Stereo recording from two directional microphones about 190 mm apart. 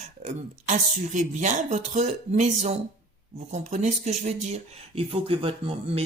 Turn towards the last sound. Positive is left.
turn(degrees=-30)  # may be behind; listen again after turning